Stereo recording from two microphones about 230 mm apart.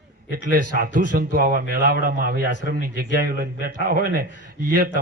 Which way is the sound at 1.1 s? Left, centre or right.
Right.